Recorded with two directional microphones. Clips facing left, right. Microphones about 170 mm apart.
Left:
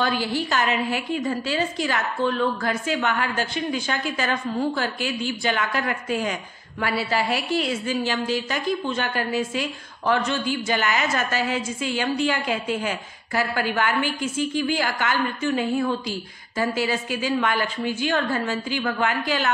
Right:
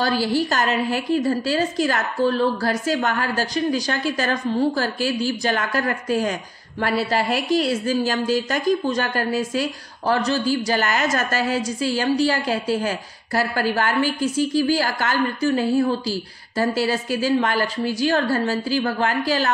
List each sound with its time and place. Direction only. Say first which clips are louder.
0.0 s a woman's voice: right 4 dB; 35° right (ahead or behind)